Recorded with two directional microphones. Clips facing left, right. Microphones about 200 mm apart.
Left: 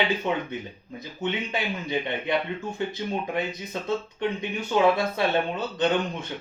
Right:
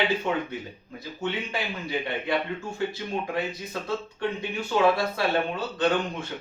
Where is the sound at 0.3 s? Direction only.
20° left (ahead or behind).